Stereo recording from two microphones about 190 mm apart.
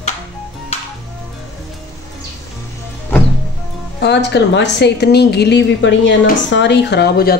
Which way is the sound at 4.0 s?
65° left (ahead or behind).